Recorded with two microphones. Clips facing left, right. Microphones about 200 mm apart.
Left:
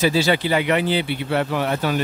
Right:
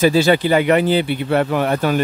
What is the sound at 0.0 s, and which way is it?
Speech, 50° right (ahead or behind).